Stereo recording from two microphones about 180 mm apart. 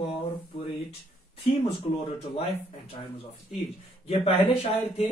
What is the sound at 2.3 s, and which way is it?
Speech, 30° left (ahead or behind).